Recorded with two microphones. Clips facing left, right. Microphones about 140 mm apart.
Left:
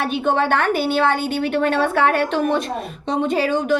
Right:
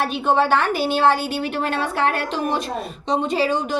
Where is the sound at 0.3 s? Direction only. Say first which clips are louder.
Right 1 dB; 55° left (ahead or behind).